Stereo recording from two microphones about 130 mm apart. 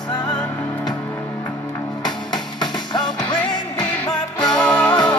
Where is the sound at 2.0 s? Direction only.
35° left (ahead or behind).